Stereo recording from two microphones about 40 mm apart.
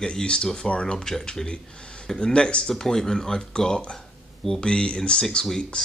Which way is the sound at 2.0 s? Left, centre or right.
Centre.